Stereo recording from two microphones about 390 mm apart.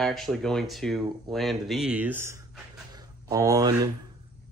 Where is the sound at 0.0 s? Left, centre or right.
Centre.